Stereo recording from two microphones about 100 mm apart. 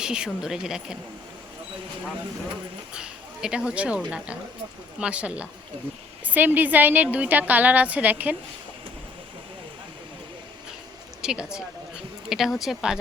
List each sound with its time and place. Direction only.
0.0 s a woman's voice: 10° right (ahead or behind)
2.9 s a woman's voice: 5° right (ahead or behind)
11.2 s speech: 5° right (ahead or behind)